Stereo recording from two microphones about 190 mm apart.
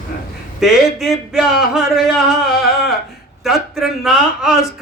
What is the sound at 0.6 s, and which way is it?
A man's voice, centre (ahead or behind).